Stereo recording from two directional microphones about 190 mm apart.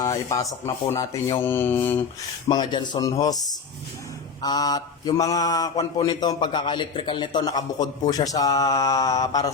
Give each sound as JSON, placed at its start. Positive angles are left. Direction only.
{"t": 0.0, "sound": "speech", "side_deg": 15}
{"t": 2.5, "sound": "speech", "side_deg": 25}